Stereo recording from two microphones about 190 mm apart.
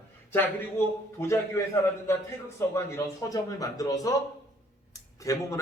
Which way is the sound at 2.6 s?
15° left (ahead or behind).